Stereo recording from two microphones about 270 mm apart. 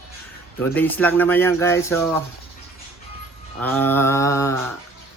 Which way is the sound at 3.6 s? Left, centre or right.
Centre.